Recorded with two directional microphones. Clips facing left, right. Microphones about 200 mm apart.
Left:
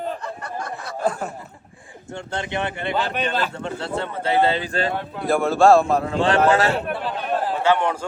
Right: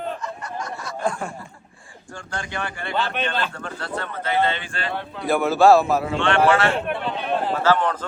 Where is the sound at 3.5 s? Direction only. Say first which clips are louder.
Left 4 dB; 25° left (ahead or behind).